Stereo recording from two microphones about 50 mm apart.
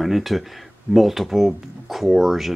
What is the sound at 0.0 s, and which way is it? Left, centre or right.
Speech, centre.